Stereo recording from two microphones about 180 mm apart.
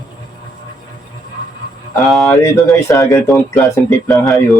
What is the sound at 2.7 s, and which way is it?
Speech, 15° left (ahead or behind).